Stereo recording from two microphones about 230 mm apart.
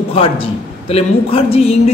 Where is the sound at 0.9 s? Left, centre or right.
Left.